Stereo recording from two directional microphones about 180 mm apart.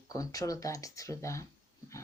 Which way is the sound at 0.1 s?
20° left (ahead or behind).